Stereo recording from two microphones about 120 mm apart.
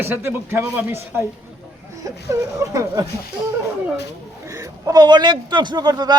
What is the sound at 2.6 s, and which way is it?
Speech, 25° right (ahead or behind).